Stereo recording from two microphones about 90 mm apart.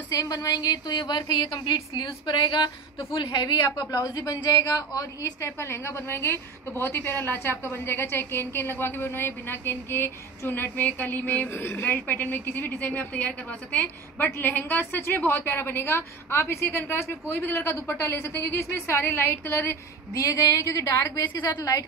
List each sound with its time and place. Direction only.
0.1 s a woman's voice: 40° left (ahead or behind); by 3.8 s 55° left (ahead or behind)
3.9 s a woman's voice: 45° left (ahead or behind)
5.4 s a woman's voice: 30° left (ahead or behind)
20.2 s a woman's voice: 40° left (ahead or behind)
21.5 s a woman's voice: 50° left (ahead or behind)